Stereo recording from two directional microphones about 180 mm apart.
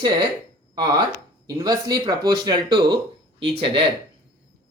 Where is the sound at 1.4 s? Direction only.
20° right (ahead or behind).